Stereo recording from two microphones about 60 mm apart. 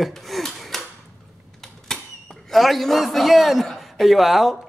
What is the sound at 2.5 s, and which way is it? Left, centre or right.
A man's voice, centre.